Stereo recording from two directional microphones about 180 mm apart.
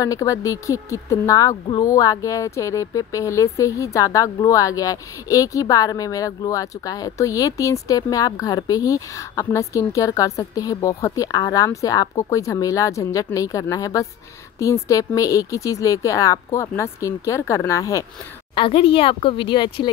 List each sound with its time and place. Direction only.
0.0 s speech: 20° left (ahead or behind)
18.5 s speech: 30° left (ahead or behind)